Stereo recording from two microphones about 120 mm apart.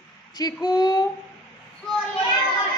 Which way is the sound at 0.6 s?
35° left (ahead or behind).